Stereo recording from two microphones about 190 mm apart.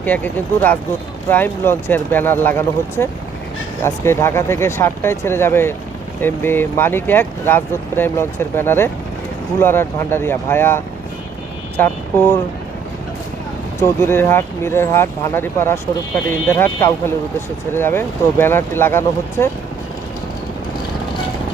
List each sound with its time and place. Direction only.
0.0 s speech: 10° left (ahead or behind)
11.8 s speech: 10° left (ahead or behind)
13.8 s speech: 15° left (ahead or behind)